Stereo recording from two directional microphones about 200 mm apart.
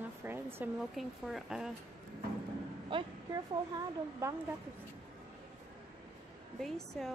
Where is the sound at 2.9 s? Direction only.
20° right (ahead or behind).